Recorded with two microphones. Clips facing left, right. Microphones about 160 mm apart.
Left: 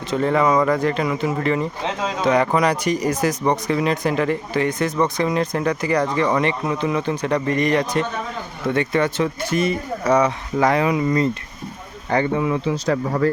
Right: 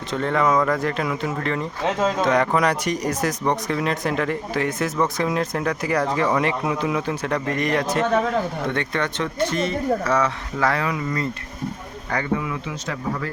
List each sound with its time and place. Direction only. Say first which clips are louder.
0.1 s a man's voice: left 3 dB; 5° left (ahead or behind); by 13.3 s 40° left (ahead or behind)